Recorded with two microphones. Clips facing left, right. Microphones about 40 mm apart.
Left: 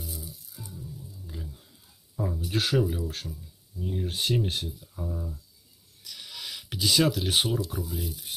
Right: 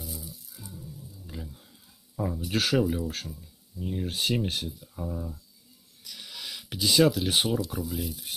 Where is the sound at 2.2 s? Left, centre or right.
Right.